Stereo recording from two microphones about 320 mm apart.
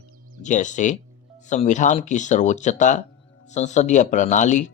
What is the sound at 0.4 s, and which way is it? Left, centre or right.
Speech, left.